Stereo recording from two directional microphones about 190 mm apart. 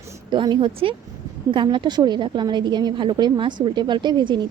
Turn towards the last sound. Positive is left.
turn(degrees=-25)  # may be behind; listen again after turning